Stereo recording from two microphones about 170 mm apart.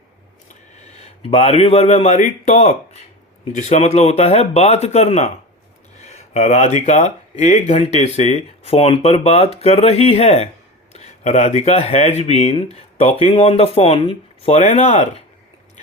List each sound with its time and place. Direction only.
0.8 s speech: 40° left (ahead or behind)